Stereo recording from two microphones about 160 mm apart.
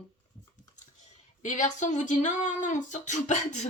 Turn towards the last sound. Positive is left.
turn(degrees=45)  # may be behind; listen again after turning